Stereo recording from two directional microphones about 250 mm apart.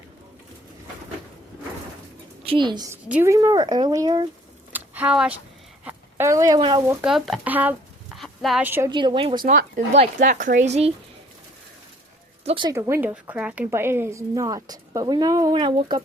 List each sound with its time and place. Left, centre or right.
2.4 s a woman's voice: right
4.7 s a sound: centre
5.8 s speech: centre
9.4 s speech: right
12.5 s a woman's voice: centre